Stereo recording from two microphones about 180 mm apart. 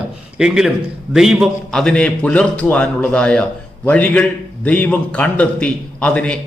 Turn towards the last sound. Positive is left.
turn(degrees=5)  # may be behind; listen again after turning